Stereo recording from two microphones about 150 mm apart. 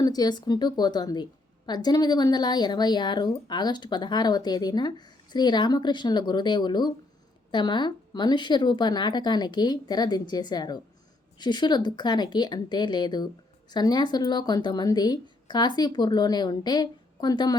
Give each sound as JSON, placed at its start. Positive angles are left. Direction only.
{"t": 0.0, "sound": "a woman's voice", "side_deg": 25}